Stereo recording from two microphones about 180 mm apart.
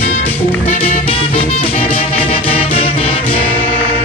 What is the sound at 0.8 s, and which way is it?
Music, 30° left (ahead or behind).